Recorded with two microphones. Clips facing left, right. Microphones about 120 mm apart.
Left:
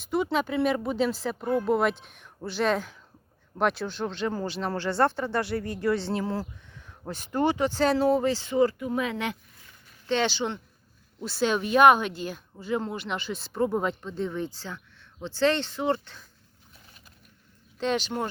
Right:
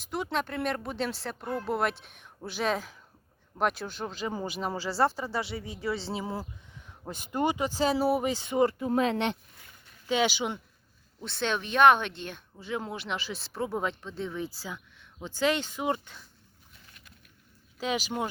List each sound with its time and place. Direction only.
0.0 s speech: centre (ahead or behind); by 8.9 s 20° right (ahead or behind)
8.9 s speech: 35° right (ahead or behind)
10.1 s speech: 10° right (ahead or behind)
11.2 s speech: 5° left (ahead or behind); by 16.2 s 10° right (ahead or behind)
17.7 s speech: 5° right (ahead or behind)